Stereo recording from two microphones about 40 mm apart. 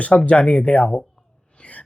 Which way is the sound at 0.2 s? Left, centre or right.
Left.